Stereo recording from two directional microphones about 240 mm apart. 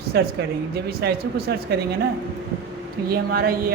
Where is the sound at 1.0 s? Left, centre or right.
Right.